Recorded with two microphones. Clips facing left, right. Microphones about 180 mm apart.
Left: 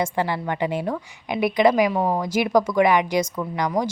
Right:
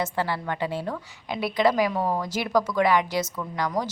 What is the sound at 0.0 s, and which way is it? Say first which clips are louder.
Speech: left 3 dB; 15° left (ahead or behind).